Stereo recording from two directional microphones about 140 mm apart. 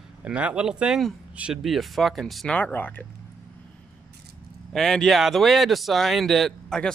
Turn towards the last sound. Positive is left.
turn(degrees=5)  # may be behind; listen again after turning